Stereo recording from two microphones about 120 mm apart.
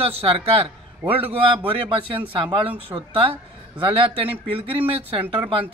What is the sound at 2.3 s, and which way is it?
Speech, 45° right (ahead or behind).